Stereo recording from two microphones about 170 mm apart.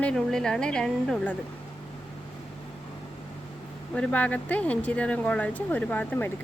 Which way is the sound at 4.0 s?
10° left (ahead or behind).